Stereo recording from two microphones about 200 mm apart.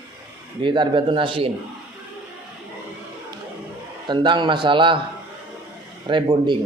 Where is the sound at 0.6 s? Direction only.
25° right (ahead or behind).